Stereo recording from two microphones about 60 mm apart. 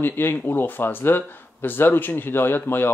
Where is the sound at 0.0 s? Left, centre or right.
Left.